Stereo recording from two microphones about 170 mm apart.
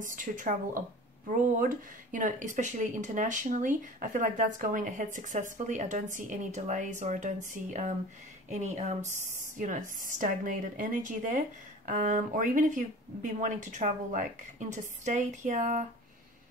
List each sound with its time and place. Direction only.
0.0 s speech: 50° right (ahead or behind)